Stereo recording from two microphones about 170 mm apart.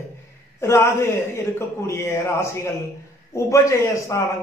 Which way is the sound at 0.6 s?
15° left (ahead or behind).